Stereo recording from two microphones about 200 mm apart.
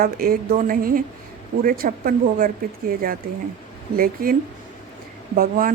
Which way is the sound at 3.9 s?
45° right (ahead or behind).